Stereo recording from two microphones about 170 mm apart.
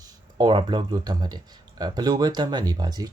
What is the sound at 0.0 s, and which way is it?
Speech, 25° right (ahead or behind).